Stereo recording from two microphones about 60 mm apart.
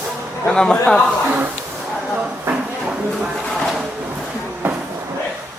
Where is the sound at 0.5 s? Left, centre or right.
Centre.